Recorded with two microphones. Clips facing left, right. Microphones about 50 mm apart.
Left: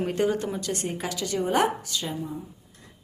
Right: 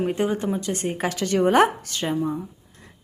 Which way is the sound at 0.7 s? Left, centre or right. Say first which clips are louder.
Right 4 dB; right.